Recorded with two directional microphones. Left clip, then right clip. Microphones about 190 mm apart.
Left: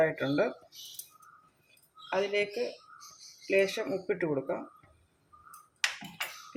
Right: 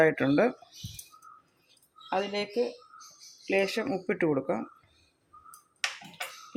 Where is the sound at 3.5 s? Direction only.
45° right (ahead or behind).